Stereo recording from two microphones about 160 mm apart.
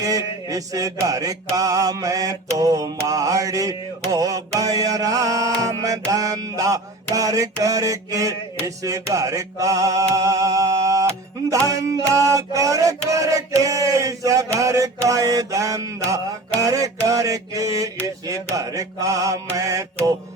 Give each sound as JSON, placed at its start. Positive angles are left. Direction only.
{"t": 0.0, "sound": "mantra", "side_deg": -20}